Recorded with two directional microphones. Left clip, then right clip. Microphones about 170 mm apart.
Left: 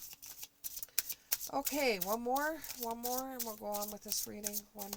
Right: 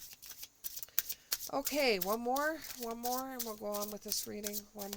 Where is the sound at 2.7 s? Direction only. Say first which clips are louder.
Left 1 dB; 20° right (ahead or behind).